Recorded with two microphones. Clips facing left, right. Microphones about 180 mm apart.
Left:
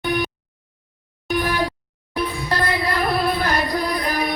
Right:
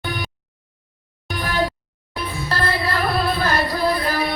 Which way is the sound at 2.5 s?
20° left (ahead or behind).